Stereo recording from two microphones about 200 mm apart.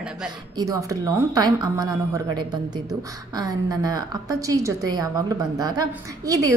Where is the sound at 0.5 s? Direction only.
20° right (ahead or behind).